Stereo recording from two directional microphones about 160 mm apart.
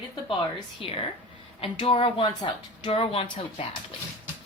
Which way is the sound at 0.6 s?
35° left (ahead or behind).